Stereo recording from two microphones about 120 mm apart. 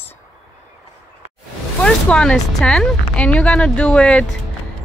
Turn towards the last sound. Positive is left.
turn(degrees=5)  # may be behind; listen again after turning